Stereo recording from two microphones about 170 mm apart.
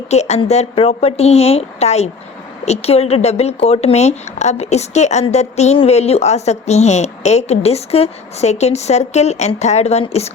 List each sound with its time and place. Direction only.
0.1 s speech: 40° left (ahead or behind)